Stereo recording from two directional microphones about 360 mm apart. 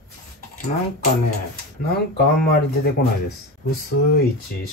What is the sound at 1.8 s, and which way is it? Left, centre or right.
Speech, left.